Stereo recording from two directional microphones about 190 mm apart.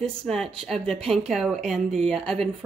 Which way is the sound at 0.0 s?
Centre (ahead or behind).